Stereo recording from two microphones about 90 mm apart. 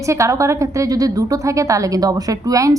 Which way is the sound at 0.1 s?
35° right (ahead or behind).